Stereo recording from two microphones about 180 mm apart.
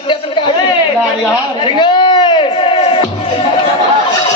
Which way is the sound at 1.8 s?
25° left (ahead or behind).